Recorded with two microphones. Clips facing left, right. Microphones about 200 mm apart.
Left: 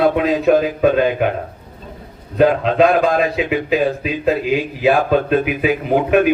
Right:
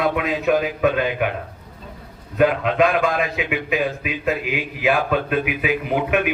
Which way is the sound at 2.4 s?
35° left (ahead or behind).